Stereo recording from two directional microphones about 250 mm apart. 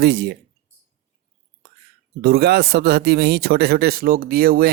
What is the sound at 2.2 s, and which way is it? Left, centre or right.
Speech, right.